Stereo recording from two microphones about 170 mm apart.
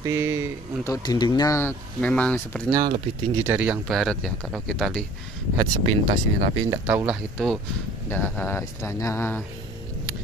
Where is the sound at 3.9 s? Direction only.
Centre (ahead or behind).